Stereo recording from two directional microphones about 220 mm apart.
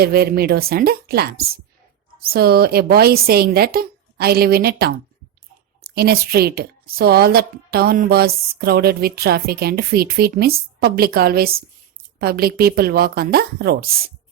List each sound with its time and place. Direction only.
0.0 s a woman's voice: 45° right (ahead or behind)